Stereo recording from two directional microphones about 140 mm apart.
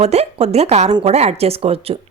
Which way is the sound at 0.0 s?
50° right (ahead or behind).